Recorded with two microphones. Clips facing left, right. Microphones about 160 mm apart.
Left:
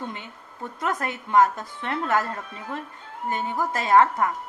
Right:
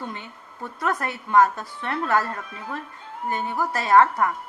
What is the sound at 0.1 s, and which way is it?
A woman's voice, 20° left (ahead or behind).